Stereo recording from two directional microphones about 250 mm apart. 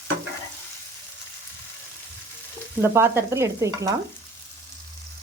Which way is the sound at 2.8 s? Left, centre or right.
Centre.